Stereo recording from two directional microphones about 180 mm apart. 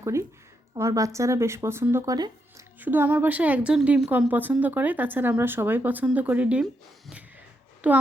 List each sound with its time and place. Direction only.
0.0 s a woman's voice: 15° right (ahead or behind)
2.8 s a woman's voice: 10° right (ahead or behind)
7.8 s a woman's voice: 10° right (ahead or behind)